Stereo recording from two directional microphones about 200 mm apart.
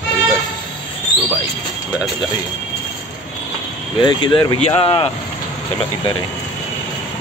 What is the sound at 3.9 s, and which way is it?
Speech, 25° left (ahead or behind).